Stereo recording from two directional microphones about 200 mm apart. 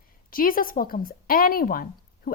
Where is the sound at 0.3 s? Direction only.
45° left (ahead or behind).